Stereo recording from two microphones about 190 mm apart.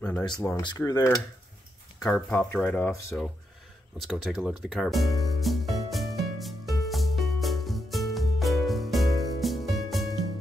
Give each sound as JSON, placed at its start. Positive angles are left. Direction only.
{"t": 0.6, "sound": "speech", "side_deg": 20}
{"t": 2.0, "sound": "speech", "side_deg": 5}
{"t": 4.0, "sound": "music", "side_deg": 0}